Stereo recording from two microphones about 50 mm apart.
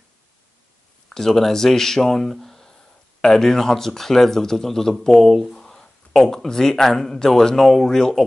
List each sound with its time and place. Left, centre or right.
1.1 s speech: centre